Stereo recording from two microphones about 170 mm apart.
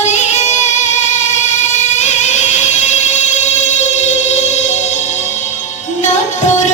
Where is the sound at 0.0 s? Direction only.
45° left (ahead or behind).